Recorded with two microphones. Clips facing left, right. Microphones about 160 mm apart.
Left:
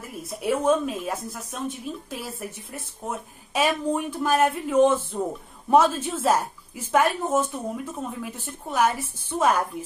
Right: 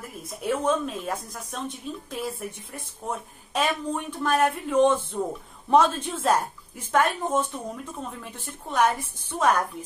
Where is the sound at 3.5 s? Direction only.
10° left (ahead or behind).